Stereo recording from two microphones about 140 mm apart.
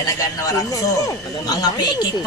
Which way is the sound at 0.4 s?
25° left (ahead or behind).